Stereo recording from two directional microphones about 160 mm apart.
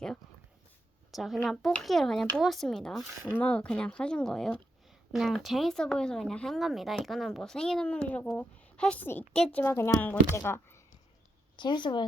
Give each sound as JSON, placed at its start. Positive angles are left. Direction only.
{"t": 1.1, "sound": "speech", "side_deg": 0}
{"t": 11.5, "sound": "speech", "side_deg": 30}